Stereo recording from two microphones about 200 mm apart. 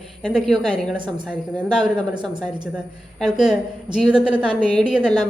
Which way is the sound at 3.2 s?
Centre (ahead or behind).